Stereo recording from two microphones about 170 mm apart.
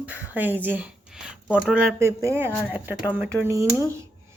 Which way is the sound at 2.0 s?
15° right (ahead or behind).